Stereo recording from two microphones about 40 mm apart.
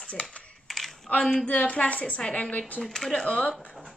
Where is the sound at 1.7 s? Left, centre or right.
Left.